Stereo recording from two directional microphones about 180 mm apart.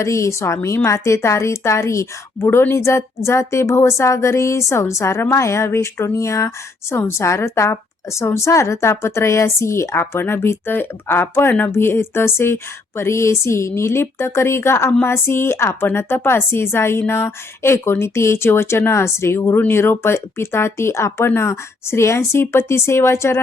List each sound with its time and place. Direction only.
0.0 s speech: 15° left (ahead or behind)